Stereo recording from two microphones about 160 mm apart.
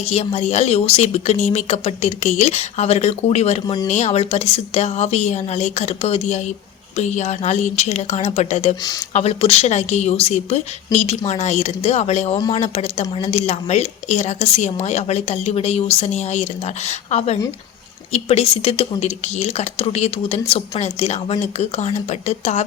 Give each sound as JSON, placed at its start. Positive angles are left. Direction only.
{"t": 0.0, "sound": "speech", "side_deg": 40}